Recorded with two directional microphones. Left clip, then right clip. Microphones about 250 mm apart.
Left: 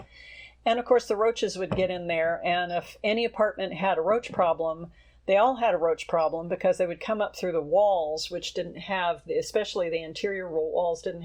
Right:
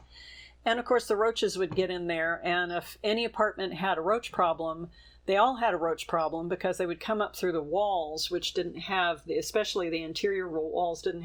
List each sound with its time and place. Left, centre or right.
0.6 s speech: centre